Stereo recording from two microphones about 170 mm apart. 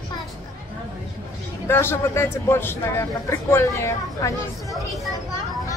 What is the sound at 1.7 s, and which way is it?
Speech, 15° left (ahead or behind).